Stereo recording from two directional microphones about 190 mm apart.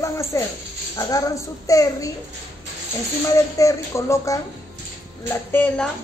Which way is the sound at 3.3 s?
15° left (ahead or behind).